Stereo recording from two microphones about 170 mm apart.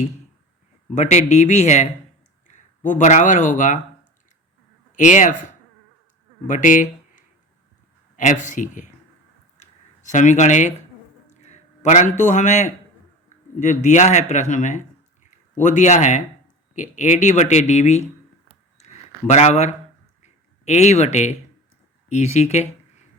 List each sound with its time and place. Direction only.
0.9 s speech: 45° left (ahead or behind)
4.9 s speech: 45° left (ahead or behind)
6.5 s speech: 50° left (ahead or behind)
10.1 s a man's voice: 45° left (ahead or behind)
19.3 s speech: 40° left (ahead or behind)
20.2 s a sound: 40° left (ahead or behind)
22.1 s speech: 40° left (ahead or behind)